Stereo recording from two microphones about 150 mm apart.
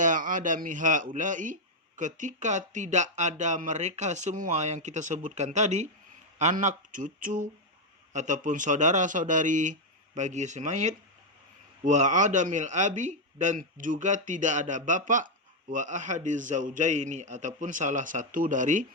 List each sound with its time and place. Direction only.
0.0 s speech: 60° right (ahead or behind)